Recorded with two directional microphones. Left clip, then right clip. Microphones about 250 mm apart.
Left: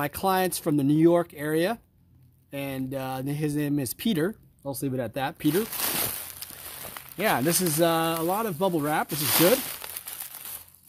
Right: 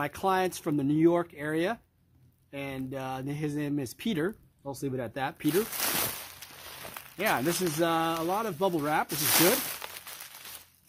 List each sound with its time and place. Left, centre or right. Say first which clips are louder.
0.0 s speech: left 3 dB; left
5.5 s speech: right 1 dB; centre
7.2 s speech: left 3 dB; left
7.5 s speech: left 3 dB; left
7.8 s speech: left 4 dB; left
9.1 s crumpling: left 5 dB; centre